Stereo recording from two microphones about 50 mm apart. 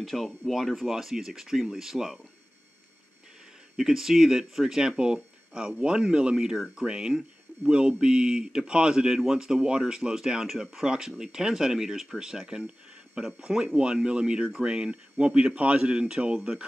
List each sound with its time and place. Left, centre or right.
0.0 s speech: centre
3.7 s speech: centre